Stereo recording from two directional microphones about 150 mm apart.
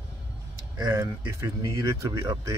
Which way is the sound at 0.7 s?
25° right (ahead or behind).